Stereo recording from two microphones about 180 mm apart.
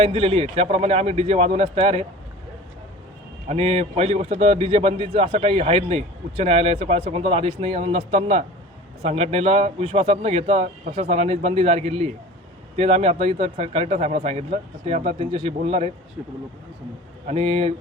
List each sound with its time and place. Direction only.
0.0 s speech: 30° right (ahead or behind)
3.5 s speech: 35° right (ahead or behind)
17.2 s speech: 35° right (ahead or behind)